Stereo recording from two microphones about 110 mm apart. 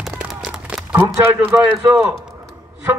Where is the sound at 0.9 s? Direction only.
15° right (ahead or behind).